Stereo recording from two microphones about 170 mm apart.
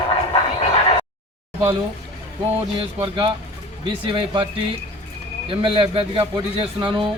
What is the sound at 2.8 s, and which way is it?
A man's voice, 30° right (ahead or behind).